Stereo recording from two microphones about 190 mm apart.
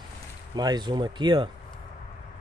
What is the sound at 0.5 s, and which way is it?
Speech, 20° right (ahead or behind).